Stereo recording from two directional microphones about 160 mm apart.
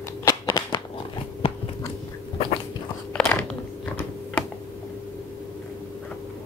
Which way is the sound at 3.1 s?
10° left (ahead or behind).